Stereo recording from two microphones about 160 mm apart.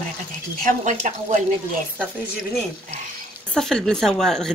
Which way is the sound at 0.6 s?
55° right (ahead or behind).